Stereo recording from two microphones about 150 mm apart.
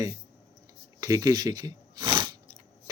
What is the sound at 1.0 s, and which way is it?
Chewing, 25° right (ahead or behind).